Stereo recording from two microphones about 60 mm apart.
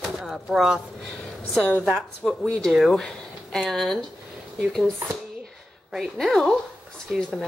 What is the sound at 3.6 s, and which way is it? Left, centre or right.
Speech, centre.